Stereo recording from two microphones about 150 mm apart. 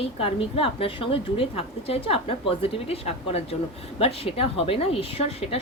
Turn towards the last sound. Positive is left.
turn(degrees=40)  # may be behind; listen again after turning